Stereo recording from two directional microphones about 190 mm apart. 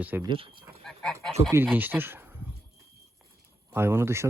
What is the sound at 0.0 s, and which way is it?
Speech, 10° right (ahead or behind).